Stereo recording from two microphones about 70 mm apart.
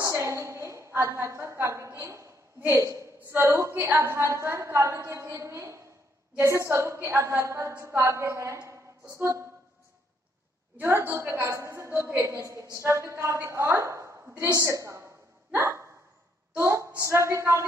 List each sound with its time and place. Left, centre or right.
0.0 s a woman's voice: right
2.6 s a woman's voice: right
10.8 s a woman's voice: right
14.6 s hiccup: right
16.5 s a woman's voice: right